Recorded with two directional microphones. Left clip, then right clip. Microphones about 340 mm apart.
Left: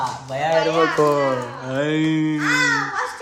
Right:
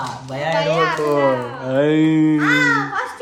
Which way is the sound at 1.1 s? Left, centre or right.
Centre.